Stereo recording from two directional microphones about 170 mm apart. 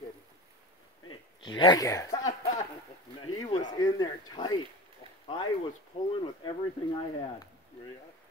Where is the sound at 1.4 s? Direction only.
25° left (ahead or behind).